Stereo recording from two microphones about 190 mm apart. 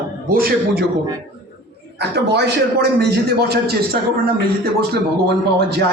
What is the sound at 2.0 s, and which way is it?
A man's voice, 60° right (ahead or behind).